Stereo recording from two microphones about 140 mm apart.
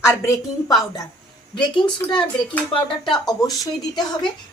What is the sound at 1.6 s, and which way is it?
A woman's voice, 35° left (ahead or behind).